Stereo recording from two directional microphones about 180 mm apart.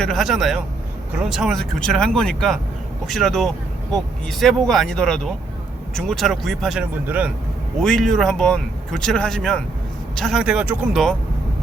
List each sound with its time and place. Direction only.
0.0 s speech: centre (ahead or behind)
7.8 s speech: 5° left (ahead or behind)